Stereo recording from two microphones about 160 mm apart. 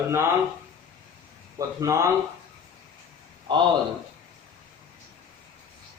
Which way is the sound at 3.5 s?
30° right (ahead or behind).